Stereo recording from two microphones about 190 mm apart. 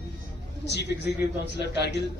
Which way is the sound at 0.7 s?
65° left (ahead or behind).